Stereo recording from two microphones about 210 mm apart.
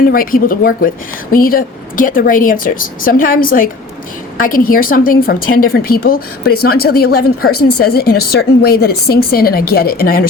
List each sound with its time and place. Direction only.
0.1 s a woman's voice: 45° left (ahead or behind)